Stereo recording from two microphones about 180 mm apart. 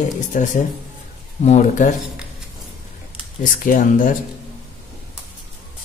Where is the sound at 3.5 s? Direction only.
50° left (ahead or behind).